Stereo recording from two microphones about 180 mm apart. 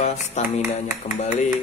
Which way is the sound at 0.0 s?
40° left (ahead or behind).